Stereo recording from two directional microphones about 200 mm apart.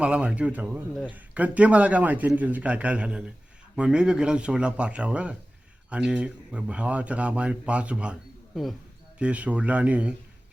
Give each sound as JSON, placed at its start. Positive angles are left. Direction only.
{"t": 0.0, "sound": "speech", "side_deg": -5}